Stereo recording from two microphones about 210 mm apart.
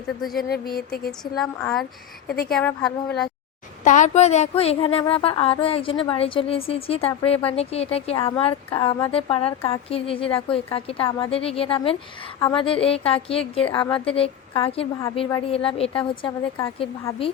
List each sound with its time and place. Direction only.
0.3 s speech: 45° left (ahead or behind)
1.2 s speech: centre (ahead or behind)
2.2 s speech: 45° left (ahead or behind)
2.5 s speech: 5° left (ahead or behind)
3.8 s a woman's voice: 35° left (ahead or behind)